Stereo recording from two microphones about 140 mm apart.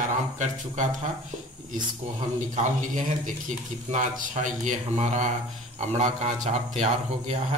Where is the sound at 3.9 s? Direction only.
65° right (ahead or behind).